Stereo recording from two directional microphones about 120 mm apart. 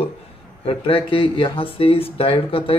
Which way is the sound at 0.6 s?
45° left (ahead or behind).